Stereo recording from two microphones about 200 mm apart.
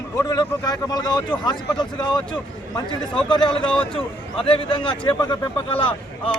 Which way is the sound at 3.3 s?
25° left (ahead or behind).